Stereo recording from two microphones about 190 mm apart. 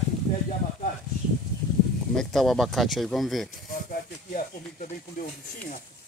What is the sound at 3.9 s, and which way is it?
Speech, 45° left (ahead or behind).